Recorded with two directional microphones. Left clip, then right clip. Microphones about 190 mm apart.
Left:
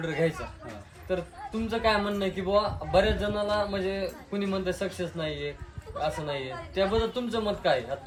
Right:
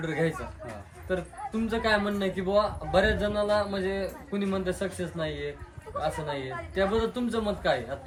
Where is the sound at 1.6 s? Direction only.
10° left (ahead or behind).